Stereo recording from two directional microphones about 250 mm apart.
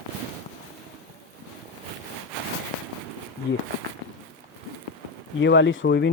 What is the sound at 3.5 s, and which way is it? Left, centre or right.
Speech, left.